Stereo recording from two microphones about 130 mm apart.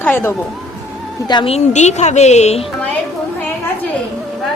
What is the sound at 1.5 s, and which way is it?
A woman's voice, 60° left (ahead or behind).